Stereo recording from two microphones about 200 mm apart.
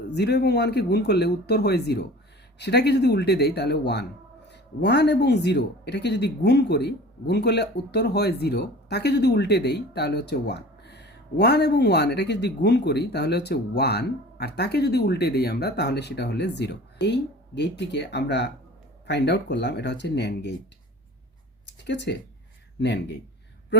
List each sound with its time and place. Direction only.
0.1 s speech: 55° left (ahead or behind)
21.8 s speech: 60° left (ahead or behind)